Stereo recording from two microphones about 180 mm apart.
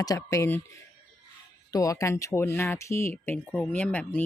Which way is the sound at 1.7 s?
20° left (ahead or behind).